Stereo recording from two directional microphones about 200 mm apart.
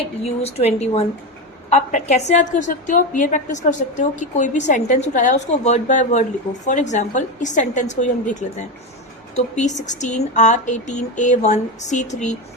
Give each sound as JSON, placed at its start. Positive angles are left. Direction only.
{"t": 0.4, "sound": "speech", "side_deg": 30}